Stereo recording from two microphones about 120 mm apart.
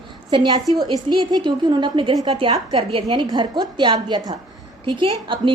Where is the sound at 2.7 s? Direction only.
50° right (ahead or behind).